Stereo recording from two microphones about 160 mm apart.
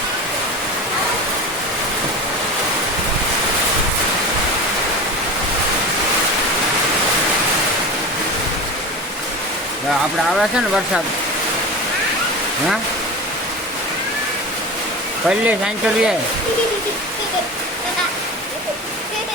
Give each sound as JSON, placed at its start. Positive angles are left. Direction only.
{"t": 15.3, "sound": "speech", "side_deg": -5}